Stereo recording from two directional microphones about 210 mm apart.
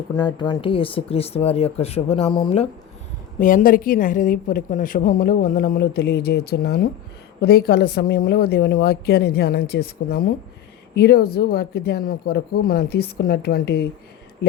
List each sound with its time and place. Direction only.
0.2 s speech: 20° left (ahead or behind)
3.4 s a woman's voice: 40° left (ahead or behind)